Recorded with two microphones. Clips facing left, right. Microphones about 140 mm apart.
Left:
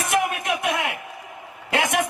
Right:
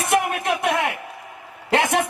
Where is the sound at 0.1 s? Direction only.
30° right (ahead or behind).